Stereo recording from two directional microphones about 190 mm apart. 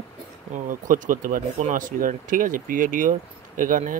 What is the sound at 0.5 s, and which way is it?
Speech, 40° right (ahead or behind).